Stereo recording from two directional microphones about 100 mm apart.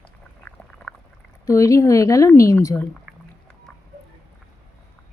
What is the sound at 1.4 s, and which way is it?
Speech, 30° left (ahead or behind).